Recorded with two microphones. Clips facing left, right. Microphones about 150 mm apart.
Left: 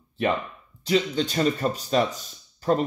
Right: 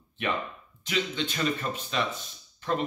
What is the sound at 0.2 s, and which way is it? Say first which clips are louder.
Speech: left 6 dB; 35° left (ahead or behind).